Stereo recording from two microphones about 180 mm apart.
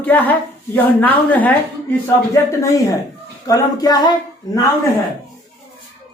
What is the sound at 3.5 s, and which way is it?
Speech, 20° left (ahead or behind).